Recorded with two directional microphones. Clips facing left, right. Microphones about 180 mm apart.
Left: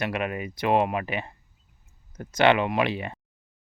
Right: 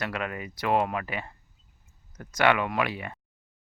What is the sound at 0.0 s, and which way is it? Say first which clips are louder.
Speech: left 4 dB; 20° left (ahead or behind).